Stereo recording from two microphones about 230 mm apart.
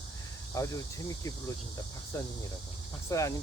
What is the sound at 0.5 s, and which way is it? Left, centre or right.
Speech, centre.